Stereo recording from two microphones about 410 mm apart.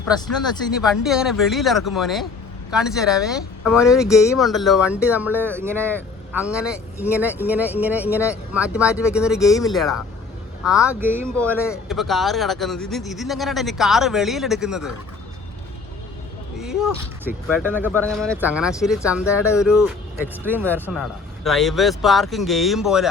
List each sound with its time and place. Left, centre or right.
0.8 s speech: centre
16.6 s speech: centre